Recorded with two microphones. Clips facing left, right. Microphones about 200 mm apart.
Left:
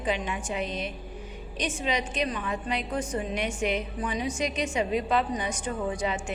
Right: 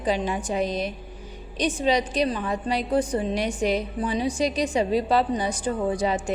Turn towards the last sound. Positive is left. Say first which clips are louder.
# right 5 dB
turn(degrees=-35)  # may be behind; listen again after turning